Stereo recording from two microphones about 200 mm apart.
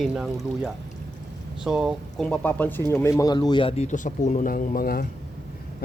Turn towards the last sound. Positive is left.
turn(degrees=45)  # may be behind; listen again after turning